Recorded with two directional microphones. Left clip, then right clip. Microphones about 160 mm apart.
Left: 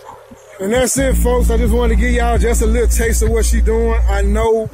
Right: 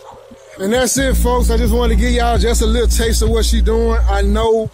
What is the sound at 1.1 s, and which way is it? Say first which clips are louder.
Speech: even; 15° right (ahead or behind).